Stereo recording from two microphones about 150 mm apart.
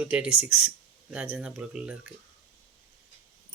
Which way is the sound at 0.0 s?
10° right (ahead or behind).